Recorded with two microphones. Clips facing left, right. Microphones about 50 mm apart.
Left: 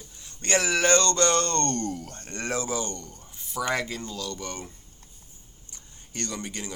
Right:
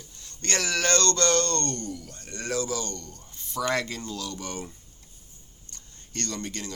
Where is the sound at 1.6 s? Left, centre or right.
Left; by 4.7 s centre.